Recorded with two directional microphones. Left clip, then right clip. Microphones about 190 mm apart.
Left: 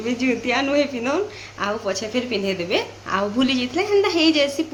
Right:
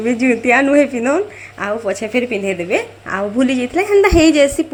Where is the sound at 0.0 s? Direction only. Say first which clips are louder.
Right 7 dB; 20° right (ahead or behind).